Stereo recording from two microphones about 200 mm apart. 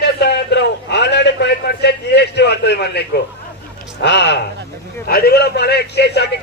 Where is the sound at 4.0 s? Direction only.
60° left (ahead or behind).